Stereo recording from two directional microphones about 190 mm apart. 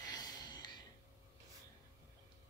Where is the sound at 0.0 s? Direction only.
20° left (ahead or behind).